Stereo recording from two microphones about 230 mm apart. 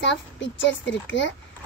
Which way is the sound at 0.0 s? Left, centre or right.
Left.